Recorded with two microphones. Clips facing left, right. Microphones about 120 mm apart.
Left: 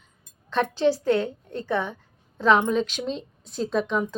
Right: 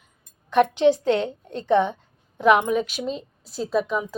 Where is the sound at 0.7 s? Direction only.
20° right (ahead or behind).